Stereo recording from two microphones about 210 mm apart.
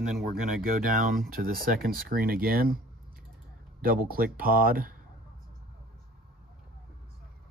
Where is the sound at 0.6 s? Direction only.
40° right (ahead or behind).